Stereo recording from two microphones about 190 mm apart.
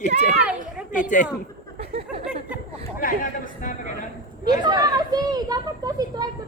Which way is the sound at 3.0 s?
45° left (ahead or behind).